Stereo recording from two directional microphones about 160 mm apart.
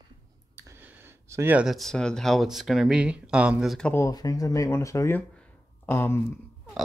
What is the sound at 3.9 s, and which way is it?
Speech, 20° left (ahead or behind).